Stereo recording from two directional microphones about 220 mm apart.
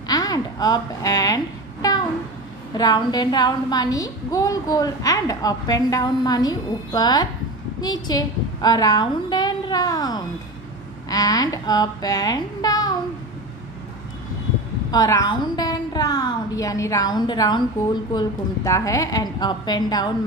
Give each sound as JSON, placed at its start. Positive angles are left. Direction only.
{"t": 0.1, "sound": "a sound", "side_deg": 15}
{"t": 2.8, "sound": "a woman's voice", "side_deg": 20}
{"t": 14.9, "sound": "a woman's voice", "side_deg": 15}